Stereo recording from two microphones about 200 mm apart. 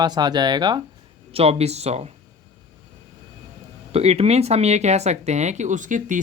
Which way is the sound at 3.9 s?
30° right (ahead or behind).